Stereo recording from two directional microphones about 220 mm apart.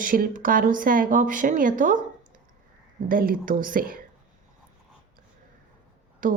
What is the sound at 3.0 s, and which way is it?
Speech, 40° right (ahead or behind).